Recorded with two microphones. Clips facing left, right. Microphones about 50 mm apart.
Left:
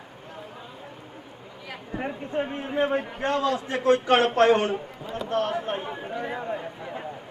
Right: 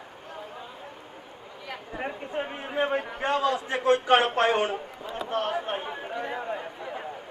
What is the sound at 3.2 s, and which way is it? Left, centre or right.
A man's voice, centre.